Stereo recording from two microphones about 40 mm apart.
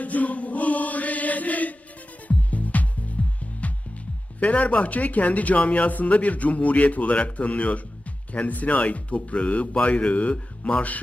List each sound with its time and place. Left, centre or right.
0.0 s chant: left
2.2 s music: left
4.4 s speech: left